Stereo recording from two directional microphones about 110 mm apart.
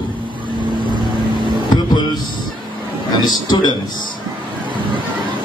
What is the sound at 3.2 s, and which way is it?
Speech, 40° left (ahead or behind).